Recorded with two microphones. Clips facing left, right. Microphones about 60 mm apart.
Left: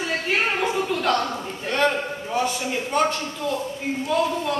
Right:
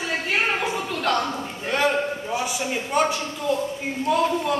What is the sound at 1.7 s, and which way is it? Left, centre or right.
A man's voice, centre.